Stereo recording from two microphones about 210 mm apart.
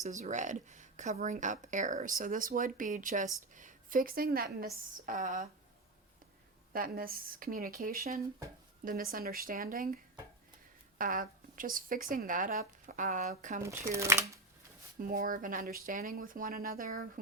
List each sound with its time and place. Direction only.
0.0 s speech: 35° right (ahead or behind)
6.7 s speech: 45° right (ahead or behind)
13.9 s speech: 15° right (ahead or behind)
14.9 s speech: 40° right (ahead or behind)